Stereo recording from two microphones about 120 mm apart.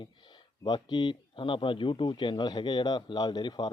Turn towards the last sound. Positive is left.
turn(degrees=40)  # may be behind; listen again after turning